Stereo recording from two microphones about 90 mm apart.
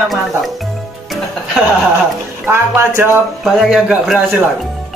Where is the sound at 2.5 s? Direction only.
25° right (ahead or behind).